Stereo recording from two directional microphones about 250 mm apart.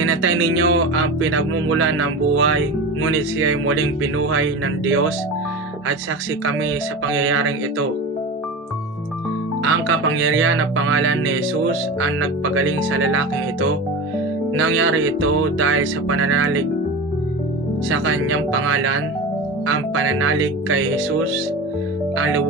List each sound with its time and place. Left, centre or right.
0.0 s music: right
7.1 s music: right
9.6 s music: right
17.8 s music: right